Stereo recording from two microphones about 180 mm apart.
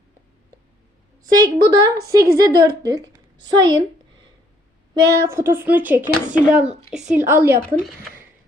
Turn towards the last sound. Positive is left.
turn(degrees=-15)  # may be behind; listen again after turning